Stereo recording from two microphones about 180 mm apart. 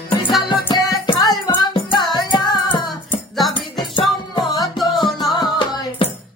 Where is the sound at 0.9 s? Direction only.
25° left (ahead or behind).